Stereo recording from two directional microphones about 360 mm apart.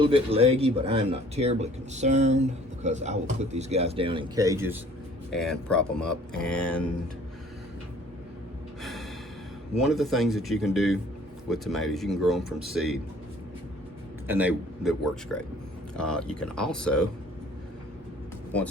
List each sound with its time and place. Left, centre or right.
0.0 s speech: centre
8.8 s gasp: centre
9.8 s speech: centre
14.3 s speech: centre